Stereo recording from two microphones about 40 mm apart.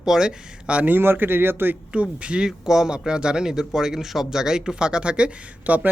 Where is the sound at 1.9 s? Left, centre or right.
Right.